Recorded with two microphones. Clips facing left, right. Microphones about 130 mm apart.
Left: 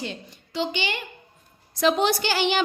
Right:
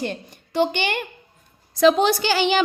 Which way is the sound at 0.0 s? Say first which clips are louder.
Right 6 dB; 55° right (ahead or behind).